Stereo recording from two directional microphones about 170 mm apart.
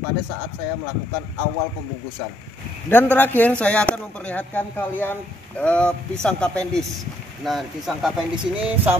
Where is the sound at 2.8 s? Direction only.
10° left (ahead or behind).